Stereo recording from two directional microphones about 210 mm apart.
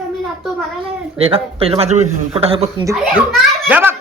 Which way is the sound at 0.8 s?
30° right (ahead or behind).